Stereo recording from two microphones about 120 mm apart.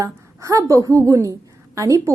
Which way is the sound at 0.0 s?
25° right (ahead or behind).